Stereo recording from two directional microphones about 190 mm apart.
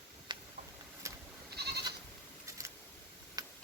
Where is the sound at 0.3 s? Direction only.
25° right (ahead or behind).